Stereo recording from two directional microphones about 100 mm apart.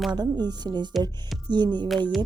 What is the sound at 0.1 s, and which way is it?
A woman's voice, 45° right (ahead or behind).